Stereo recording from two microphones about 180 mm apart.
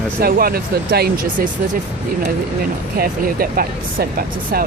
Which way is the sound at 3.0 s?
55° right (ahead or behind).